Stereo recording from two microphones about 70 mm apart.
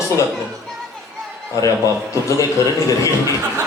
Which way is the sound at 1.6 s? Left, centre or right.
Left.